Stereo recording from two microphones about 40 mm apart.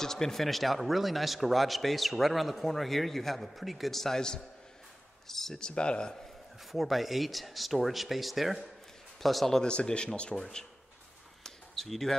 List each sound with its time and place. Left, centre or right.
0.0 s a man's voice: centre
5.2 s a sound: centre
5.6 s speech: left
6.7 s a man's voice: centre
9.6 s speech: left
10.3 s speech: centre
11.4 s a sound: centre